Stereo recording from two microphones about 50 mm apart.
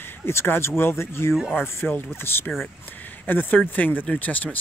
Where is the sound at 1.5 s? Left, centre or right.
Left.